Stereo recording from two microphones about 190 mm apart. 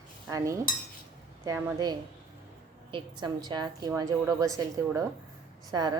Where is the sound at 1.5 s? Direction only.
20° right (ahead or behind).